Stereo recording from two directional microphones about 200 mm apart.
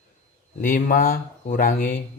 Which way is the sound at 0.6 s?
45° left (ahead or behind).